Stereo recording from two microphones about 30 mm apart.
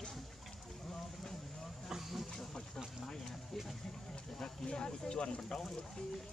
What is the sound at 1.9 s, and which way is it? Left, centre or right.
Speech, centre.